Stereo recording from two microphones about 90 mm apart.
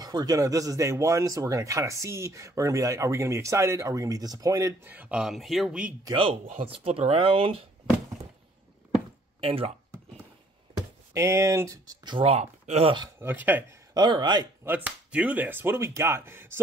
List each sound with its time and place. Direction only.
0.0 s speech: 45° right (ahead or behind)
4.8 s speech: 20° right (ahead or behind)
5.2 s speech: centre (ahead or behind)
6.1 s speech: 85° right
9.4 s speech: 90° right
11.1 s speech: 30° right (ahead or behind)
12.1 s speech: 80° right
13.2 s speech: 20° right (ahead or behind)
13.9 s speech: 55° right (ahead or behind)
14.6 s speech: 20° right (ahead or behind)